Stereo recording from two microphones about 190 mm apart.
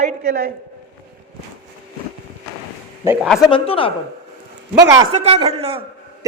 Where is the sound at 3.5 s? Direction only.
30° left (ahead or behind).